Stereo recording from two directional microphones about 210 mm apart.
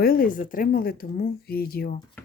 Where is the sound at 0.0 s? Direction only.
45° left (ahead or behind).